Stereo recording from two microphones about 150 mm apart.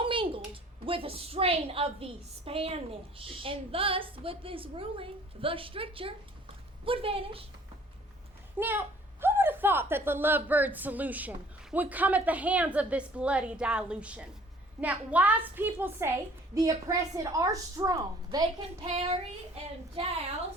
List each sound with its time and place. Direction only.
0.0 s a woman's voice: 35° right (ahead or behind)
8.5 s a woman's voice: 15° right (ahead or behind)
18.9 s child singing: 45° right (ahead or behind)
20.0 s a woman's voice: 35° right (ahead or behind)